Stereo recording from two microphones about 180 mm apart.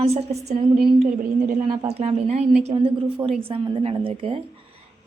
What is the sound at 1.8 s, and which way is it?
A woman's voice, 35° right (ahead or behind).